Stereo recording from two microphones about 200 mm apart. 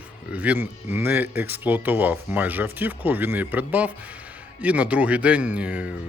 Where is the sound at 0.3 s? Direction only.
10° right (ahead or behind).